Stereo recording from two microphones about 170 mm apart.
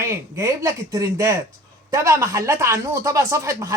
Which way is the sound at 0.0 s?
15° right (ahead or behind).